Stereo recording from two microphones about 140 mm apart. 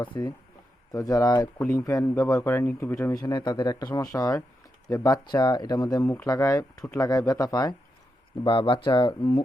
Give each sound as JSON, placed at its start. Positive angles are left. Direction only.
{"t": 0.0, "sound": "speech", "side_deg": 25}